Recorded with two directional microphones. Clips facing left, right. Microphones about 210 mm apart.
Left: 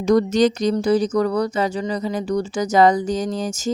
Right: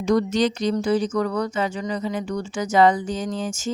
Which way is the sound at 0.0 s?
40° left (ahead or behind).